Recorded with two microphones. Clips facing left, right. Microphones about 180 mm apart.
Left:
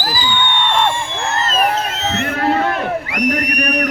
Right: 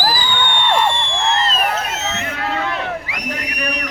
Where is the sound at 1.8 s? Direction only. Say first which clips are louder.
Left 3 dB; 30° left (ahead or behind).